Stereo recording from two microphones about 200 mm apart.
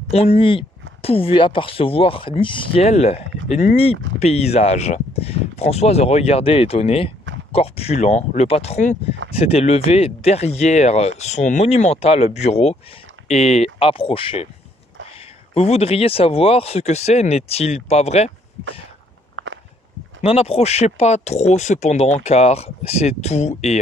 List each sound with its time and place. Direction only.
0.1 s speech: 30° left (ahead or behind)
15.5 s speech: 30° left (ahead or behind)
19.3 s walk: 70° right (ahead or behind)
20.2 s speech: 30° left (ahead or behind)